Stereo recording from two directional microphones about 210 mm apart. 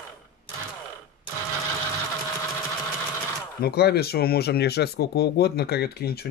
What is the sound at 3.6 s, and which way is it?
Speech, 50° left (ahead or behind).